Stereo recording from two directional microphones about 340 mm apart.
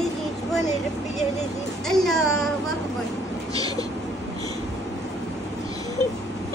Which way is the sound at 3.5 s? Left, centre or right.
Centre.